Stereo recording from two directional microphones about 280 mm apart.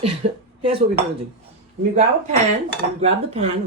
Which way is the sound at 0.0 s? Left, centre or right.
Centre.